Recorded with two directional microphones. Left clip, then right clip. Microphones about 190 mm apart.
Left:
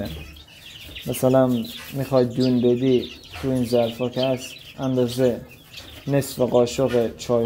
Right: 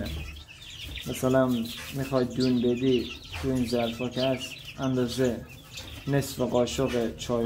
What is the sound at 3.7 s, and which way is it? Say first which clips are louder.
Speech: left 11 dB; 10° left (ahead or behind).